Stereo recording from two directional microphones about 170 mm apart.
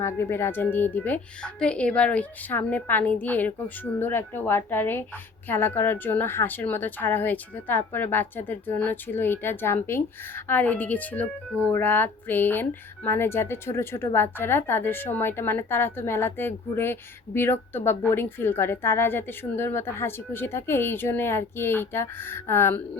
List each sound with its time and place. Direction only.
0.0 s speech: 15° left (ahead or behind)